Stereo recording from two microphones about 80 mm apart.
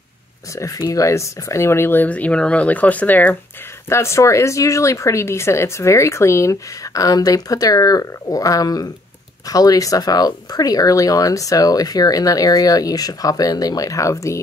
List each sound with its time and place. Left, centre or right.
0.6 s speech: left
2.0 s speech: centre
3.9 s speech: left